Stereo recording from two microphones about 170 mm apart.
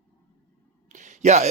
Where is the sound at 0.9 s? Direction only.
45° right (ahead or behind).